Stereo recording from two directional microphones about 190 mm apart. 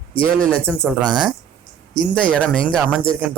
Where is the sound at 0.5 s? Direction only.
5° left (ahead or behind).